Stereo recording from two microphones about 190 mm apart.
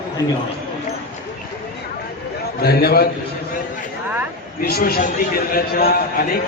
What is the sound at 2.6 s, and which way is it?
Speech, 55° left (ahead or behind).